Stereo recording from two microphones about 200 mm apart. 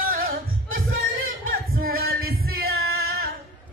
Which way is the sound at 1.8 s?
50° right (ahead or behind).